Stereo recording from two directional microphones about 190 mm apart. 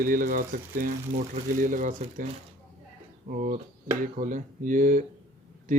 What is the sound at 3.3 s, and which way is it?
Speech, 40° right (ahead or behind).